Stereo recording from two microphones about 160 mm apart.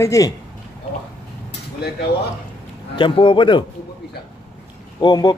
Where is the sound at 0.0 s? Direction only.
20° left (ahead or behind).